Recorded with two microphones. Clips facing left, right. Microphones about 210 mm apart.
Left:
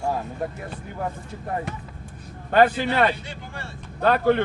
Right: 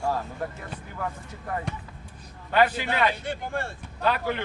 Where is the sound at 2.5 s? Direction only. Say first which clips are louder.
Left 4 dB; 50° left (ahead or behind).